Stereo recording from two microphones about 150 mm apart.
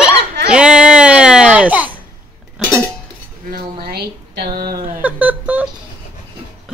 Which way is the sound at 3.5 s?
90° right.